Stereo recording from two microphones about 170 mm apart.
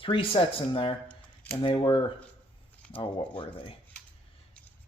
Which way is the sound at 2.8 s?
5° left (ahead or behind).